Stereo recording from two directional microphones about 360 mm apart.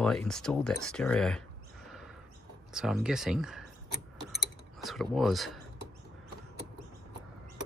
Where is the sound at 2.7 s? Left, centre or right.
Centre.